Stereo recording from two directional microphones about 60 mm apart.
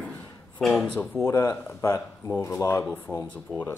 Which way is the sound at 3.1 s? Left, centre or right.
Left.